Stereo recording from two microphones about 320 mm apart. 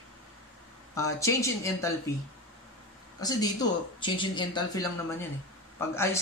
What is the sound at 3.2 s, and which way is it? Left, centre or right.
Speech, centre.